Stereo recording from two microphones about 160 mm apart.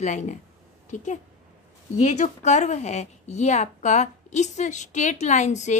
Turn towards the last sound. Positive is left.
turn(degrees=50)  # may be behind; listen again after turning